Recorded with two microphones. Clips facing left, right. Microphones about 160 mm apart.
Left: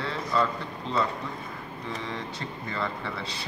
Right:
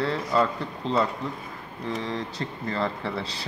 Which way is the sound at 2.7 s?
35° right (ahead or behind).